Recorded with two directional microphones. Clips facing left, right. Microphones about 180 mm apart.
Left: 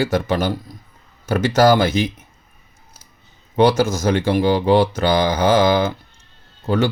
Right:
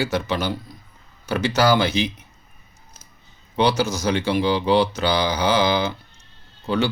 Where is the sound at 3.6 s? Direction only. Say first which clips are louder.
Left 5 dB; 50° left (ahead or behind).